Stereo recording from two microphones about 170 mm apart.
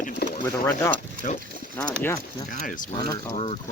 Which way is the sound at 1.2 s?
60° left (ahead or behind).